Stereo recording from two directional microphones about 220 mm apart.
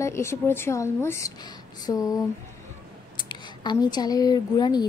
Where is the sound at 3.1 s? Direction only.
20° left (ahead or behind).